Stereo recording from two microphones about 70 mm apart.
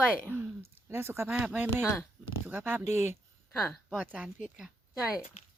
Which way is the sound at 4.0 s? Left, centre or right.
Right.